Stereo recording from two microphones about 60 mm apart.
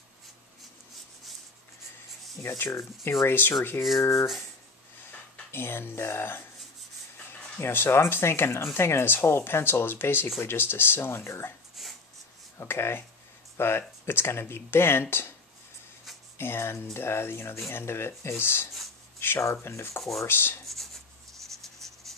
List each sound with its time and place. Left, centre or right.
2.4 s speech: left
3.3 s speech: left
5.5 s speech: left
7.3 s a sound: centre
7.6 s speech: left
11.8 s a sound: centre
12.6 s speech: left
16.3 s speech: left
19.1 s a sound: left
19.4 s speech: left
20.0 s speech: centre
20.2 s speech: left
20.6 s writing: centre